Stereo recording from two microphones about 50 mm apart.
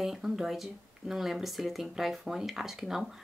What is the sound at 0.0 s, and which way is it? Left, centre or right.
A woman's voice, centre.